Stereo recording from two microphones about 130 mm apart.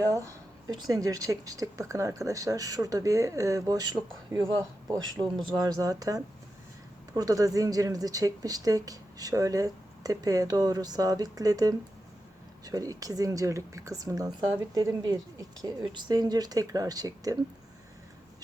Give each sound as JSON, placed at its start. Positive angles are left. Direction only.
{"t": 0.0, "sound": "speech", "side_deg": -25}